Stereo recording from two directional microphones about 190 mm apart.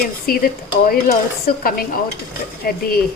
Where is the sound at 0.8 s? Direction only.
50° left (ahead or behind).